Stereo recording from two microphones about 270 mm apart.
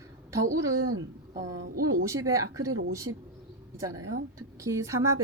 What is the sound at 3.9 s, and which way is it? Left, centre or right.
Speech, right.